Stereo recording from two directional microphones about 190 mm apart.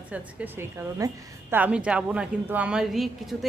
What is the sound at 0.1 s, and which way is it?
A woman's voice, 10° right (ahead or behind).